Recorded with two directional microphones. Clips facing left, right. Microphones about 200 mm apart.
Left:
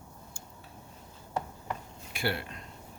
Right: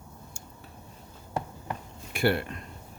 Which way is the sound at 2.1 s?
55° right (ahead or behind).